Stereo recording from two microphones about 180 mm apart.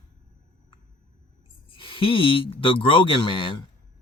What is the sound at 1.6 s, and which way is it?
Speech, 30° left (ahead or behind).